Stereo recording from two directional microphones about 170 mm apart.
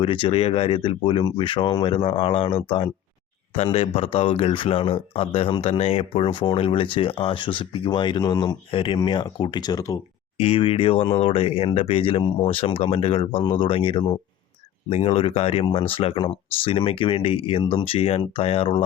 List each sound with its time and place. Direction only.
0.0 s speech: 30° left (ahead or behind)
10.3 s speech: 35° left (ahead or behind)